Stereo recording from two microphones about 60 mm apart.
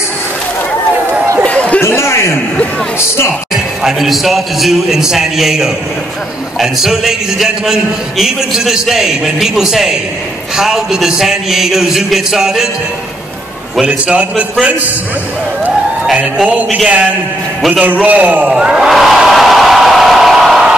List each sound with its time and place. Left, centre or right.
1.4 s a sound: left
1.8 s a man's voice: left
3.8 s a man's voice: centre
13.7 s a man's voice: centre
17.6 s a man's voice: centre
17.8 s a man's voice: right
18.5 s crowd: centre